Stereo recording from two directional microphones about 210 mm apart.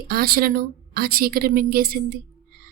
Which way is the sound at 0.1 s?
45° right (ahead or behind).